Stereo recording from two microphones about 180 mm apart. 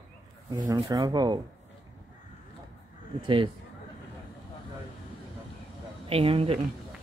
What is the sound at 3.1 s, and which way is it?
Speech, 25° right (ahead or behind).